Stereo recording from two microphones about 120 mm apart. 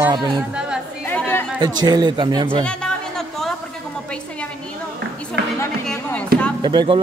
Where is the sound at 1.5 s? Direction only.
35° right (ahead or behind).